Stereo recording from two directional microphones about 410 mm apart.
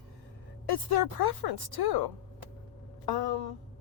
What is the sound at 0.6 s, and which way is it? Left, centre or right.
A woman's voice, left.